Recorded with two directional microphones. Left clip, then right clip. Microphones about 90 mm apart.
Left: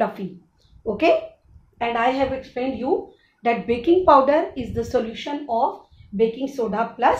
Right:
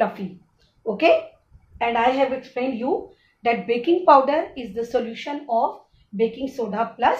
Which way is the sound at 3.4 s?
50° left (ahead or behind).